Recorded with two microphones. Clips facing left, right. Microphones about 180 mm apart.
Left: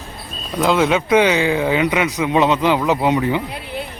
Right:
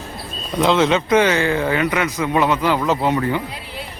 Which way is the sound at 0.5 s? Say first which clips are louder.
Even; 5° left (ahead or behind).